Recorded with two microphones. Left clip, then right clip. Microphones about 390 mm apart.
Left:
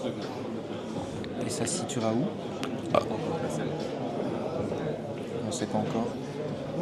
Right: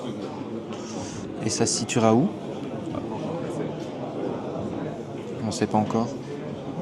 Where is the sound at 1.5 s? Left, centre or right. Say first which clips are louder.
Right 9 dB; right.